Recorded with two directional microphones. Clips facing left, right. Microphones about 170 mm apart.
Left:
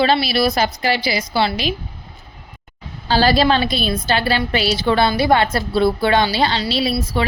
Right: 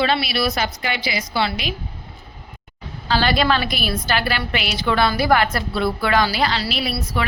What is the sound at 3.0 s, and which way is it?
A woman's voice, 35° left (ahead or behind).